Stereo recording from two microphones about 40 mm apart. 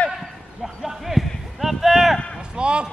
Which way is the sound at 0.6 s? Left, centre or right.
Centre.